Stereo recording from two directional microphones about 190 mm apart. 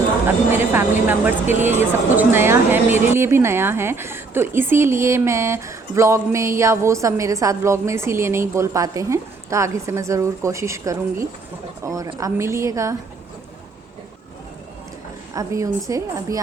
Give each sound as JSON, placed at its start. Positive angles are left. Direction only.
{"t": 0.3, "sound": "speech", "side_deg": -10}
{"t": 15.4, "sound": "speech", "side_deg": -15}